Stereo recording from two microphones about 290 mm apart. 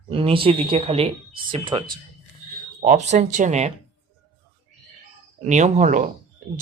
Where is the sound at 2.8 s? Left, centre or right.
Right.